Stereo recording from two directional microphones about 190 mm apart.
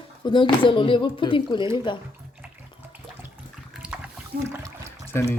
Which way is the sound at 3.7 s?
5° right (ahead or behind).